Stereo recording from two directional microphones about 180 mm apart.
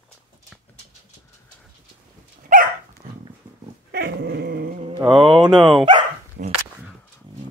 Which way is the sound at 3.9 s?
65° right (ahead or behind).